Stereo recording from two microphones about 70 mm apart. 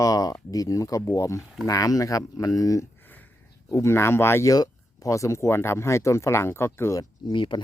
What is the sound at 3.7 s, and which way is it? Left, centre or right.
Speech, left.